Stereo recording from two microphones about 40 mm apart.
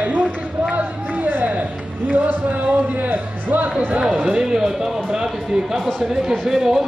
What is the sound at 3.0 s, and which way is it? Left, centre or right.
Music, right.